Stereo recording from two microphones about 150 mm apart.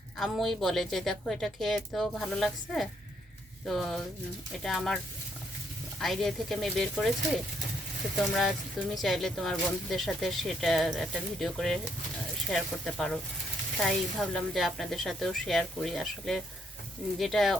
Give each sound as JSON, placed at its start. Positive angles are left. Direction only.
{"t": 0.2, "sound": "speech", "side_deg": 0}
{"t": 6.0, "sound": "speech", "side_deg": 0}